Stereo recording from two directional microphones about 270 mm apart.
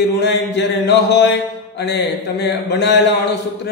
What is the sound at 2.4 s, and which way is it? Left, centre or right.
Speech, left.